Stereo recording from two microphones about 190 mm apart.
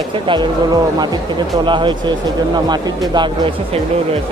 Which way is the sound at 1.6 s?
25° right (ahead or behind).